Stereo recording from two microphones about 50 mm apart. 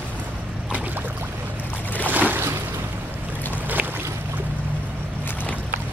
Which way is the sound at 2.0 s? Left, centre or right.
Right.